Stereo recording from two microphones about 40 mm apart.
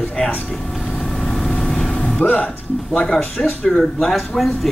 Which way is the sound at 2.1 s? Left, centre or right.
Left.